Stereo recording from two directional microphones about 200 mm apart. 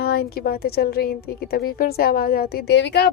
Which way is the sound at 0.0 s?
50° left (ahead or behind).